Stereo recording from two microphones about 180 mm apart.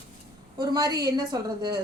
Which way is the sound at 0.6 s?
20° right (ahead or behind).